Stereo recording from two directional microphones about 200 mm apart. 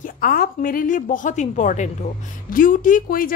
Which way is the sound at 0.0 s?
45° left (ahead or behind).